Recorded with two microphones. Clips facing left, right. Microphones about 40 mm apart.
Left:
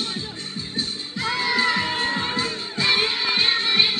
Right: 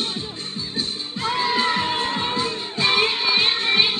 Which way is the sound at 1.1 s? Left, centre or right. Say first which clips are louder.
Right 1 dB; right.